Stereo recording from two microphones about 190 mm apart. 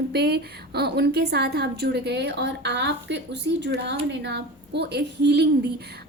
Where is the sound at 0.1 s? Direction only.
60° right (ahead or behind).